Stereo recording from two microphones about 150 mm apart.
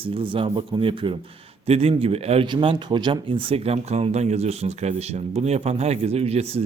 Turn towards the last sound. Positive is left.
turn(degrees=-45)  # may be behind; listen again after turning